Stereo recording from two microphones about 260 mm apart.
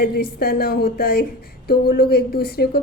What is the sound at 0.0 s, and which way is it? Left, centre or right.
A woman's voice, left.